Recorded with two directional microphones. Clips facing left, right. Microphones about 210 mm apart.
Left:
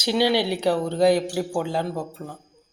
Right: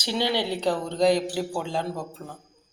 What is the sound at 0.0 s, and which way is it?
Speech, 10° left (ahead or behind).